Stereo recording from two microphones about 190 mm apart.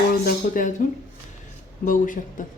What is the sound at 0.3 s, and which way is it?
Speech, 45° left (ahead or behind).